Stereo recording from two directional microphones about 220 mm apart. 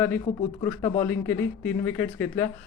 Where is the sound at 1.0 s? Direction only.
5° left (ahead or behind).